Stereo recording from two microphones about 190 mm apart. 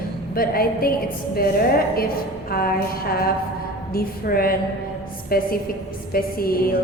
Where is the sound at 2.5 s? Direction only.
50° left (ahead or behind).